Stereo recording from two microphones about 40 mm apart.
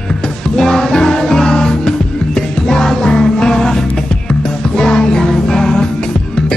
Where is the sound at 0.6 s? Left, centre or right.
Centre.